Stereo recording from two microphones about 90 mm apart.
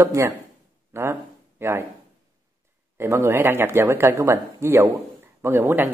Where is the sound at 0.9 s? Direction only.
30° right (ahead or behind).